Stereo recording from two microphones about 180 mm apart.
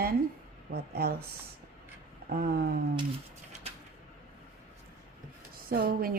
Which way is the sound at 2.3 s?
55° right (ahead or behind).